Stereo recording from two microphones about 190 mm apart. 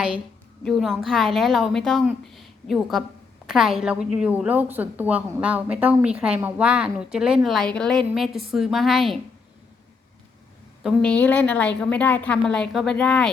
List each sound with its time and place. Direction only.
0.6 s a woman's voice: centre (ahead or behind)
10.8 s a woman's voice: 5° left (ahead or behind)